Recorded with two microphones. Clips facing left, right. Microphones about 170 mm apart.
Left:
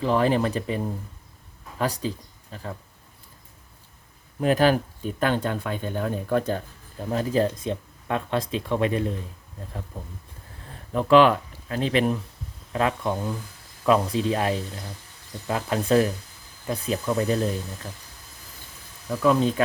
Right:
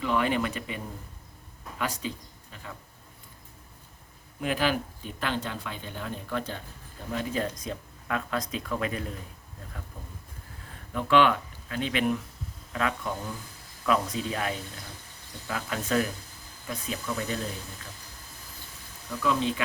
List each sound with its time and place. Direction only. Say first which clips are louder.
0.0 s speech: left 5 dB; 35° left (ahead or behind)
1.8 s speech: left 6 dB; 35° left (ahead or behind)
4.4 s speech: left 8 dB; 40° left (ahead or behind)
7.1 s speech: left 7 dB; 35° left (ahead or behind)
10.9 s speech: left 6 dB; 35° left (ahead or behind)
19.2 s speech: left 7 dB; 45° left (ahead or behind)